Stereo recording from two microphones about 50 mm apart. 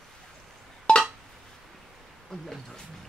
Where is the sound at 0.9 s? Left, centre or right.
Left.